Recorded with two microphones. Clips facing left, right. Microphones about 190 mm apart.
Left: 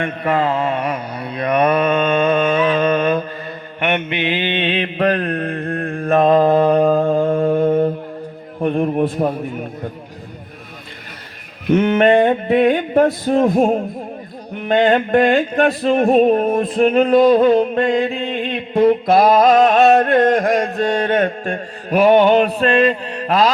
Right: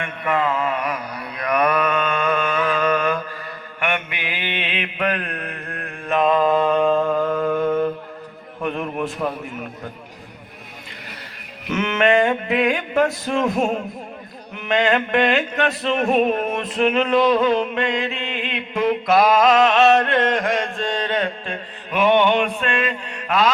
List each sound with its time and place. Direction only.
0.0 s mantra: 35° left (ahead or behind)
8.6 s music: 30° left (ahead or behind)
11.7 s music: 35° left (ahead or behind)